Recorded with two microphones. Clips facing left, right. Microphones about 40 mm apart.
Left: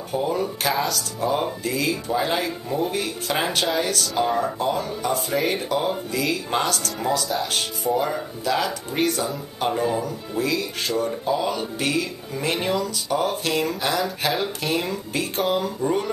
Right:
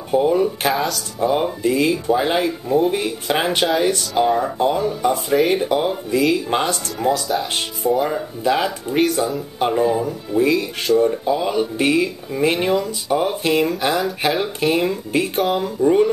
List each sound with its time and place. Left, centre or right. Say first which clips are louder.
0.1 s speech: right 8 dB; right
0.7 s speech: right 2 dB; centre
1.2 s speech: right 6 dB; centre
4.1 s speech: right 4 dB; centre
4.6 s speech: right 6 dB; right
5.0 s speech: right 6 dB; centre
7.0 s speech: right 6 dB; centre
8.1 s speech: right 5 dB; right
8.9 s speech: right 5 dB; centre
9.6 s speech: right 5 dB; centre
10.4 s speech: right 6 dB; right
11.1 s speech: right 4 dB; centre